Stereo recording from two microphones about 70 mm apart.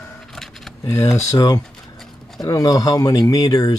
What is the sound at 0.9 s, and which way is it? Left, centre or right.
Speech, left.